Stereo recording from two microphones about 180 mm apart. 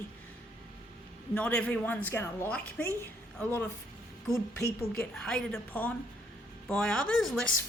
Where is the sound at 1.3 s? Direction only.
10° left (ahead or behind).